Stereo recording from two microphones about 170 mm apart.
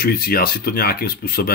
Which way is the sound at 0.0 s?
60° left (ahead or behind).